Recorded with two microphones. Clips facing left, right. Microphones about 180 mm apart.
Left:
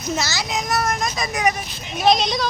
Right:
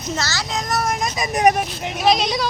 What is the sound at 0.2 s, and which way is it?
Speech, 15° left (ahead or behind).